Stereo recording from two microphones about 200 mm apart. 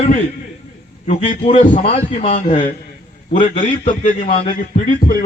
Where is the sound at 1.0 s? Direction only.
35° left (ahead or behind).